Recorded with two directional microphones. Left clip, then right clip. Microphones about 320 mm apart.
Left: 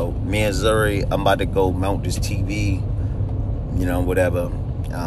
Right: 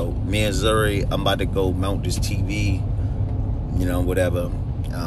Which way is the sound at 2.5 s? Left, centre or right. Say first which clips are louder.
Left 1 dB; left.